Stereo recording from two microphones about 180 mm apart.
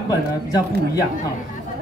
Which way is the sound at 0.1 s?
20° left (ahead or behind).